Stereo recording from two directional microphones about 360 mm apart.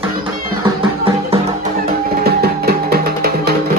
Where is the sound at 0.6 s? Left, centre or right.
Centre.